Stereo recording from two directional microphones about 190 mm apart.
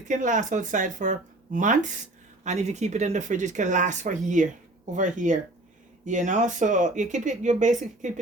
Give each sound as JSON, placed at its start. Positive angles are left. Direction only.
{"t": 0.1, "sound": "speech", "side_deg": -40}